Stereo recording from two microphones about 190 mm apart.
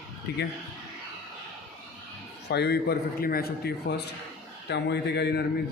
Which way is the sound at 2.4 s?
60° left (ahead or behind).